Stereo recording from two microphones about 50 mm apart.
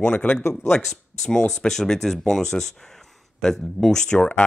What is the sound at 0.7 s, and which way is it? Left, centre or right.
Speech, centre.